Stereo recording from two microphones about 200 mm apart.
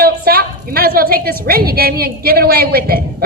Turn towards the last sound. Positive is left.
turn(degrees=-50)  # may be behind; listen again after turning